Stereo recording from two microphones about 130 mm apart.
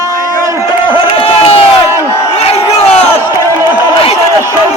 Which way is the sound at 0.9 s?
40° left (ahead or behind).